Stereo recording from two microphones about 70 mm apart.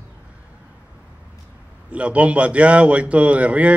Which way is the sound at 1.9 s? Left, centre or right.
Centre.